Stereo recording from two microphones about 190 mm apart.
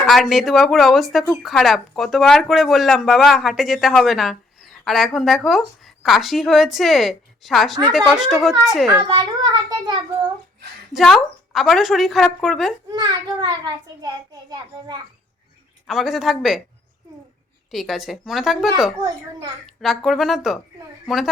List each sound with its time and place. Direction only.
0.0 s speech: centre (ahead or behind)
9.1 s a sound: 20° right (ahead or behind)
10.9 s speech: centre (ahead or behind)
12.9 s a child's voice: 20° right (ahead or behind)
15.9 s speech: centre (ahead or behind)
17.7 s speech: centre (ahead or behind)